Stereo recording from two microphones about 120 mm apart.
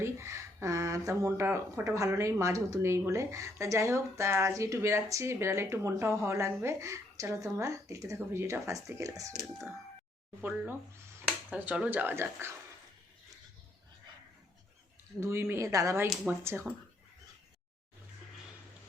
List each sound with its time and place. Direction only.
0.0 s speech: 25° right (ahead or behind)
10.4 s speech: 15° right (ahead or behind)
15.2 s speech: 20° right (ahead or behind)